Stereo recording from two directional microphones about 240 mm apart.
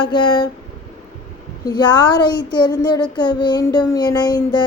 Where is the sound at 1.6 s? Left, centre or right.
Centre.